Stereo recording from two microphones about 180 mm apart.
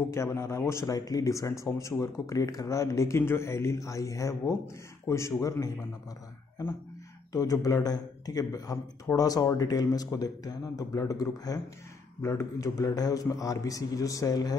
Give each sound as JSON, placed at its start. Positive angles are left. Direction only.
{"t": 0.1, "sound": "speech", "side_deg": 15}
{"t": 7.3, "sound": "speech", "side_deg": 20}